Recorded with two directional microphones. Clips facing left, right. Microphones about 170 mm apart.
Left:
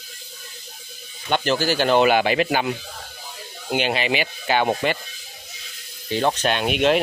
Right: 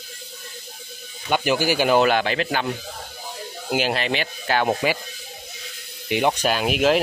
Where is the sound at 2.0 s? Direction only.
10° left (ahead or behind).